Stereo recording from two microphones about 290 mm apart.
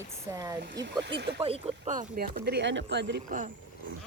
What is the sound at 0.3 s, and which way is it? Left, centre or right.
Speech, centre.